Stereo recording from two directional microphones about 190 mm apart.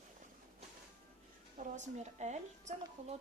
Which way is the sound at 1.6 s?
40° right (ahead or behind).